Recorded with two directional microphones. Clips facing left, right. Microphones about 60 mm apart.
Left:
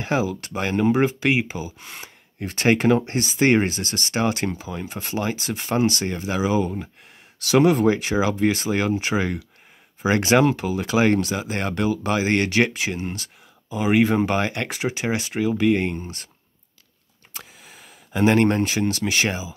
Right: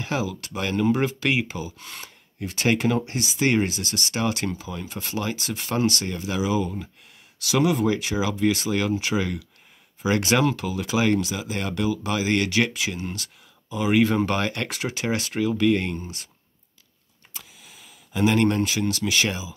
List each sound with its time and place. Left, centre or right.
0.0 s speech: left
2.4 s speech: left
11.0 s speech: left
17.3 s speech: left